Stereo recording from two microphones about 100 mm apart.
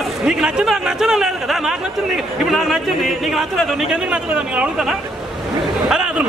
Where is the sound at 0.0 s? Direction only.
5° right (ahead or behind).